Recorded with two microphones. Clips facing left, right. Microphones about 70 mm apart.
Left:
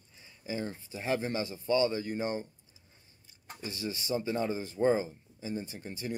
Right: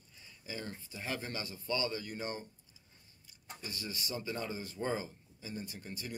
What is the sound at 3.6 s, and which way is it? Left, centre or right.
Speech, left.